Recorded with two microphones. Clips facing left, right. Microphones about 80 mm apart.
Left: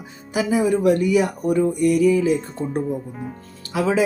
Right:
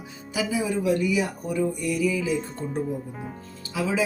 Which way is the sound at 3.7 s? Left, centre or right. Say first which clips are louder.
Left 6 dB; left.